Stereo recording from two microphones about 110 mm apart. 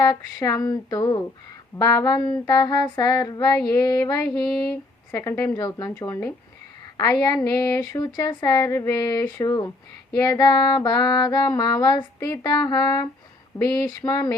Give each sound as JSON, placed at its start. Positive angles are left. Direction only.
{"t": 0.0, "sound": "female singing", "side_deg": 35}
{"t": 5.5, "sound": "female singing", "side_deg": 35}
{"t": 5.9, "sound": "speech", "side_deg": 20}
{"t": 6.9, "sound": "a woman's voice", "side_deg": 35}
{"t": 7.4, "sound": "female singing", "side_deg": 35}